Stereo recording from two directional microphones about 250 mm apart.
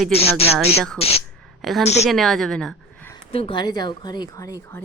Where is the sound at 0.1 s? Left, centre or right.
Left.